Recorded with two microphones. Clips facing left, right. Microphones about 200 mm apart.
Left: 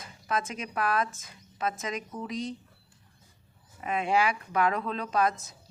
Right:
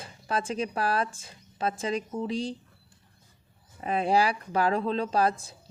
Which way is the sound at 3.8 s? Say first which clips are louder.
Right 2 dB; 35° right (ahead or behind).